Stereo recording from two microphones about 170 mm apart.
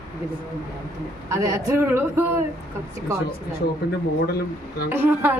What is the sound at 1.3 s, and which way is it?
Speech, 20° right (ahead or behind).